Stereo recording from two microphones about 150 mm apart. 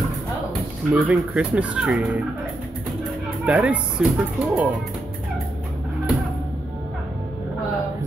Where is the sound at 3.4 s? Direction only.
5° right (ahead or behind).